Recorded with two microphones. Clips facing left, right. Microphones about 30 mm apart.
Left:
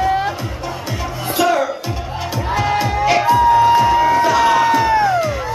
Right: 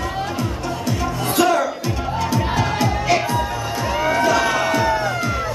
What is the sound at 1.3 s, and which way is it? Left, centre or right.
Music, centre.